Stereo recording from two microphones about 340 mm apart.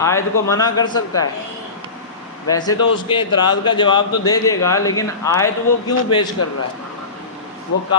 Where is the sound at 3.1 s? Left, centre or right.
Centre.